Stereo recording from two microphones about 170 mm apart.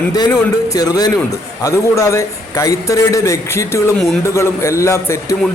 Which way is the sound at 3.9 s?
5° left (ahead or behind).